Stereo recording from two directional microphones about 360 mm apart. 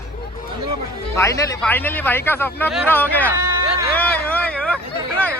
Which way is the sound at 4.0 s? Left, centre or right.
Centre.